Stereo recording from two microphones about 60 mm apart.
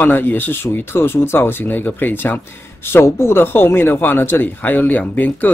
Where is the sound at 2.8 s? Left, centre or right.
Left.